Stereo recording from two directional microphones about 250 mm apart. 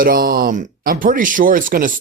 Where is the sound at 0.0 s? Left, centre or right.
Right.